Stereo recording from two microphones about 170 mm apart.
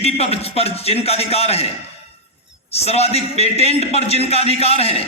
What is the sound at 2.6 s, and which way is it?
Speech, 35° left (ahead or behind).